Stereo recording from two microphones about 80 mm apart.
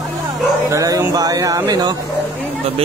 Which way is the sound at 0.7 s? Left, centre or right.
Right.